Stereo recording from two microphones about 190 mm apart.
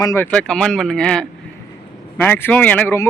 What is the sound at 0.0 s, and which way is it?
Speech, 15° left (ahead or behind).